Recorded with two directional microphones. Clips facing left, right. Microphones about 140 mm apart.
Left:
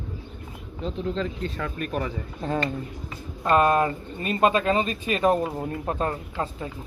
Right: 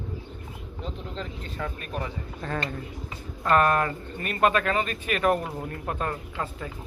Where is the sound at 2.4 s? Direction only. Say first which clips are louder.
Left 5 dB; 25° left (ahead or behind).